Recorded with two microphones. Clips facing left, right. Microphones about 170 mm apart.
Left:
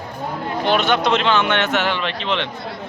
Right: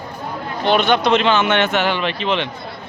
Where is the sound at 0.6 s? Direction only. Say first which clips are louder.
Right 2 dB; 5° left (ahead or behind).